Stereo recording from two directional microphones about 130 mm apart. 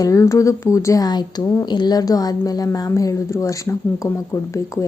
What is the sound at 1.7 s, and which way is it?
A woman's voice, 35° left (ahead or behind).